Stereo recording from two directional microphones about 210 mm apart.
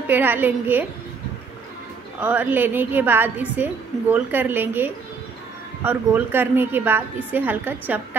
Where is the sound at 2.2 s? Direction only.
10° right (ahead or behind).